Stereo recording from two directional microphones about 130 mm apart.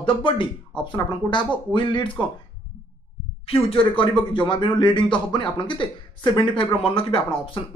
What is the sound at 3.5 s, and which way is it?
Speech, 45° left (ahead or behind).